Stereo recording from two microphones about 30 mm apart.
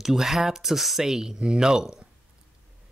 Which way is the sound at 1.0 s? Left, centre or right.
Centre.